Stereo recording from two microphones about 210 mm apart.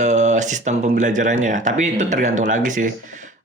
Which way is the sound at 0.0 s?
35° right (ahead or behind).